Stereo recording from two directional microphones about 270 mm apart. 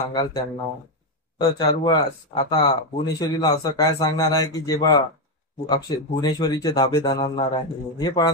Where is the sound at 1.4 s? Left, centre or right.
Centre.